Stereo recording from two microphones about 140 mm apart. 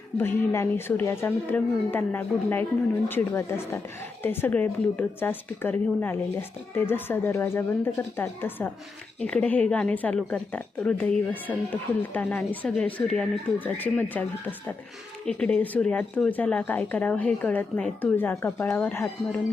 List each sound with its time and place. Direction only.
0.2 s speech: 15° left (ahead or behind)
15.3 s speech: 5° left (ahead or behind)